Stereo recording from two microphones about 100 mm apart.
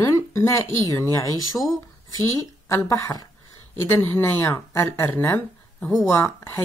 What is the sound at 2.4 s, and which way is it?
Speech, 30° left (ahead or behind).